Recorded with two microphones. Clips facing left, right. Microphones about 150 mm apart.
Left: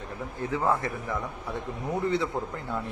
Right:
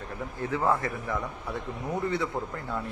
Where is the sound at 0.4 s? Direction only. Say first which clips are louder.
Even; 20° left (ahead or behind).